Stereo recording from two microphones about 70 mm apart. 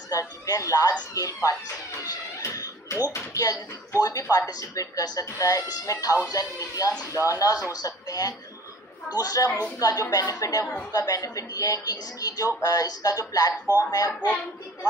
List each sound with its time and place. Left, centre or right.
0.1 s speech: left
3.1 s speech: left
5.2 s speech: left
14.2 s speech: centre